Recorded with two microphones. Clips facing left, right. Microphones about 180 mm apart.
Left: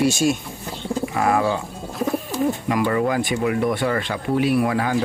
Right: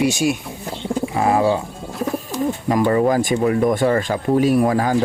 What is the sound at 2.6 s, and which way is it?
Speech, 40° right (ahead or behind).